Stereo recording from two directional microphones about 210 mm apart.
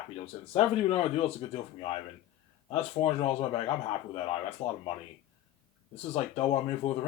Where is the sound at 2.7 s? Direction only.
30° left (ahead or behind).